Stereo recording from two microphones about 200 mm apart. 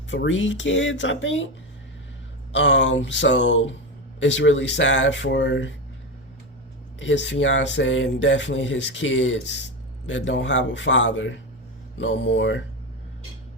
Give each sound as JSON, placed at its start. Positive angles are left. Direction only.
{"t": 0.1, "sound": "speech", "side_deg": 65}
{"t": 2.5, "sound": "speech", "side_deg": 65}
{"t": 7.0, "sound": "speech", "side_deg": 65}